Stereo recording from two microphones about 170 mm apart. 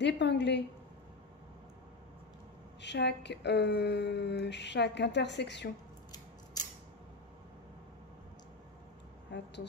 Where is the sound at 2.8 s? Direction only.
85° left.